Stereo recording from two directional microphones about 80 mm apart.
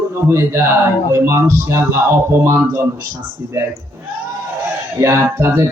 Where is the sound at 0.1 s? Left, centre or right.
Right.